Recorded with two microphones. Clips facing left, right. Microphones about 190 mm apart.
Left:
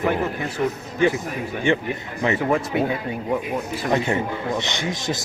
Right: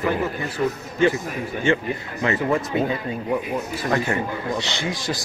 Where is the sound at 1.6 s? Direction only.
15° left (ahead or behind).